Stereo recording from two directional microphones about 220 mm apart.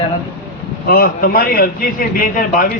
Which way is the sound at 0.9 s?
45° left (ahead or behind).